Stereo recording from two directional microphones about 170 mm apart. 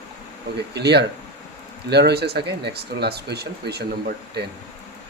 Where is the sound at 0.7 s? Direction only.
80° right.